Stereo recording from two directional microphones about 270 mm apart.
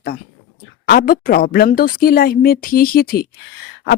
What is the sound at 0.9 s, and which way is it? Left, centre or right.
Speech, left.